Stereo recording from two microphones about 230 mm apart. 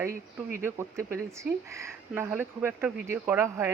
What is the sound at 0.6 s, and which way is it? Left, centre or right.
Speech, centre.